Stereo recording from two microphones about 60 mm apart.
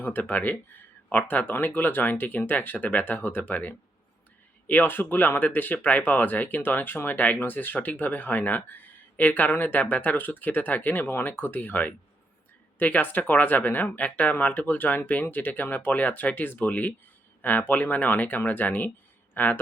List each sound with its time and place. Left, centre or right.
0.0 s speech: left